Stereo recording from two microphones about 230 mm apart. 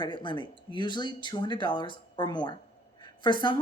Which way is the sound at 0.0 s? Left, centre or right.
Left.